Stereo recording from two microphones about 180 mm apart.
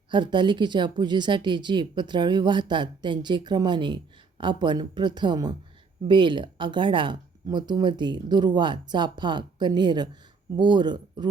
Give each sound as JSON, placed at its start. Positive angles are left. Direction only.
{"t": 0.1, "sound": "speech", "side_deg": -25}